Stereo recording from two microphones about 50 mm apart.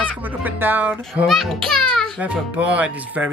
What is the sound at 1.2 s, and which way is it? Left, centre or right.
Speech, centre.